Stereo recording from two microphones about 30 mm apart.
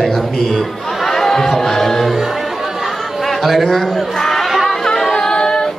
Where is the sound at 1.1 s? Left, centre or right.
Centre.